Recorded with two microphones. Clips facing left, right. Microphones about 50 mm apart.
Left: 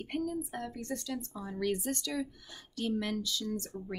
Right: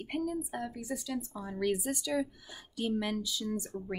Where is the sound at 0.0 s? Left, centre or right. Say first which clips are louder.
Right 1 dB; centre.